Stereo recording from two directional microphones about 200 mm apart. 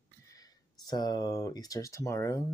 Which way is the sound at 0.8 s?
20° left (ahead or behind).